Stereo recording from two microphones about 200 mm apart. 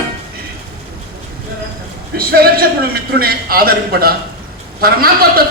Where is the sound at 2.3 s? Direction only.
50° right (ahead or behind).